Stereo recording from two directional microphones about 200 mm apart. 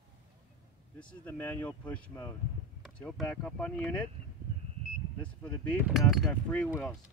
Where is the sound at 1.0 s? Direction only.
5° left (ahead or behind).